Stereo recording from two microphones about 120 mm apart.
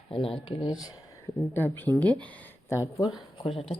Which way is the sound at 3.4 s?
55° left (ahead or behind).